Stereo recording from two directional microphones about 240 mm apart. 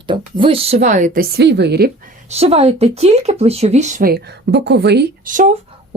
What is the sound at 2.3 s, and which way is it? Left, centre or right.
Speech, right.